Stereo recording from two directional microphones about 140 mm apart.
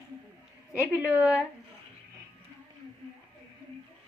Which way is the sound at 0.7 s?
15° right (ahead or behind).